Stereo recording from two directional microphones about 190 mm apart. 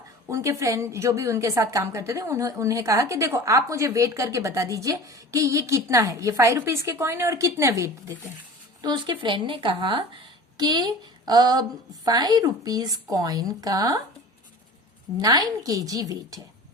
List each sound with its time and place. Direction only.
0.3 s a woman's voice: 15° right (ahead or behind)
15.2 s speech: 20° right (ahead or behind)